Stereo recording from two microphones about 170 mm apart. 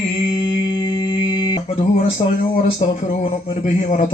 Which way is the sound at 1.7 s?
40° left (ahead or behind).